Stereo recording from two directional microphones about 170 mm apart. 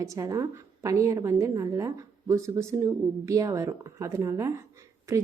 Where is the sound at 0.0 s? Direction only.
20° right (ahead or behind).